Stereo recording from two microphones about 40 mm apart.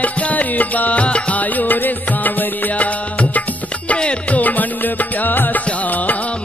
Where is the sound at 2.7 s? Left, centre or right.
Left.